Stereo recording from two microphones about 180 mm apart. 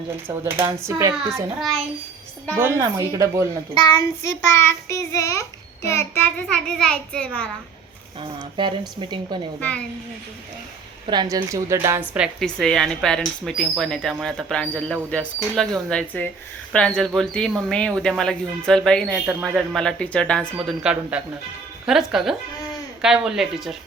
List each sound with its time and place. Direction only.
0.3 s a woman's voice: 10° right (ahead or behind)
1.5 s a woman's voice: centre (ahead or behind)
2.6 s a woman's voice: 15° right (ahead or behind)
3.9 s a child's voice: 15° left (ahead or behind)
8.2 s speech: 25° right (ahead or behind)
9.6 s a child's voice: 10° left (ahead or behind)
11.0 s a woman's voice: 25° right (ahead or behind); by 20.7 s 5° left (ahead or behind)
20.8 s a woman's voice: 5° right (ahead or behind)